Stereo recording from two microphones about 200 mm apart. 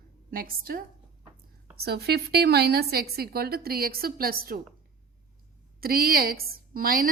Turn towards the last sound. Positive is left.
turn(degrees=-45)  # may be behind; listen again after turning